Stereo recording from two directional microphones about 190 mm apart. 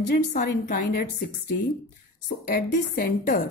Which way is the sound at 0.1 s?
50° left (ahead or behind).